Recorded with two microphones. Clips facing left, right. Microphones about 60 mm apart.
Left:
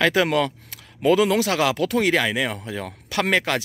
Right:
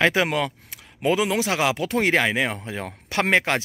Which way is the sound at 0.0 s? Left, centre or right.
Right.